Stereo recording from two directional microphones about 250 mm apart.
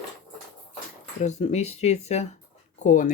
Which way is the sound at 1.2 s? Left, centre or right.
Left.